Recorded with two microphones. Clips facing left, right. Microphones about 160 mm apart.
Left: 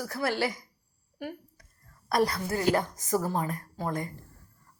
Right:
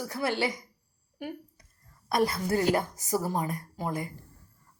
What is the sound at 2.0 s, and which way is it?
Speech, 25° right (ahead or behind).